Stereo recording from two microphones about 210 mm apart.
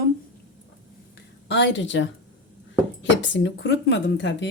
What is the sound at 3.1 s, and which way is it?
Speech, 60° left (ahead or behind).